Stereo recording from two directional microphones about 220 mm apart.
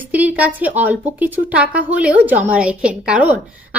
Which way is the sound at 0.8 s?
5° right (ahead or behind).